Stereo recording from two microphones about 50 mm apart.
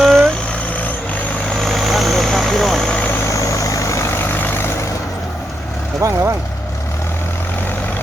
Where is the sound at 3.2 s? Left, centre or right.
Left.